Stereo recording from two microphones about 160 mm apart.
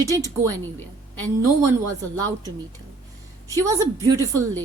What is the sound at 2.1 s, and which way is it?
A woman's voice, 25° right (ahead or behind).